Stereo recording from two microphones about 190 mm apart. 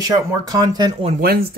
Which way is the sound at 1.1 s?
55° right (ahead or behind).